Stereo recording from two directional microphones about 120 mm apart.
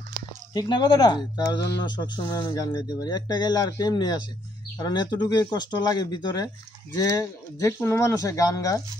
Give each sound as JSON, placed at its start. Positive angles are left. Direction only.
{"t": 0.5, "sound": "speech", "side_deg": 40}